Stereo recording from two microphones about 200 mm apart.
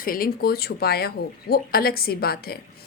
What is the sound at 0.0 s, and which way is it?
Speech, 45° left (ahead or behind).